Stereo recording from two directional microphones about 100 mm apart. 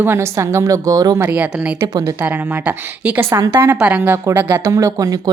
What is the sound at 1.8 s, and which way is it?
Speech, 35° right (ahead or behind).